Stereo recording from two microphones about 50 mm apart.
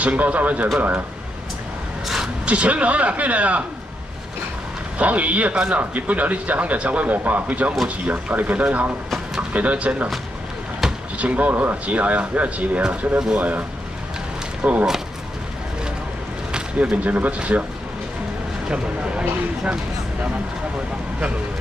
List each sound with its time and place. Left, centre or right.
0.0 s speech: right
2.0 s a sound: centre
2.4 s speech: right
4.9 s speech: right
11.1 s speech: right
16.9 s speech: right
18.7 s speech: right